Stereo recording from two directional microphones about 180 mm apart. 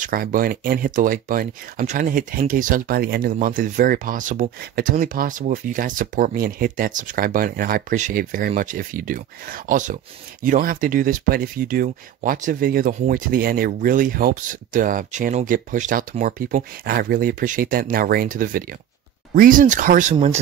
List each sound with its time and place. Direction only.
0.0 s speech: 50° right (ahead or behind)